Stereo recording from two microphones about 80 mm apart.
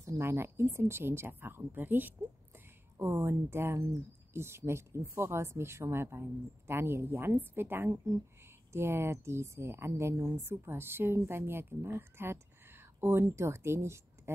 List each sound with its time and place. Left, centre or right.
0.2 s speech: right